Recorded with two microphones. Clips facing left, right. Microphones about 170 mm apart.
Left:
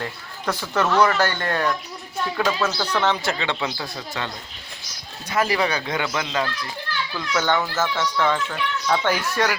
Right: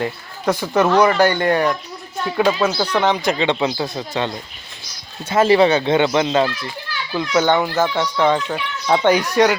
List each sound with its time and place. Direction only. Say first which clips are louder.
0.0 s speech: right 7 dB; 15° right (ahead or behind)
5.3 s speech: right 9 dB; 25° right (ahead or behind)